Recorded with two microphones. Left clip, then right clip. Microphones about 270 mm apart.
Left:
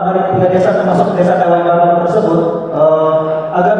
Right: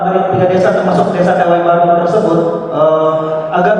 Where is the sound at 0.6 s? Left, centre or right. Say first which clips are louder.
Even; left.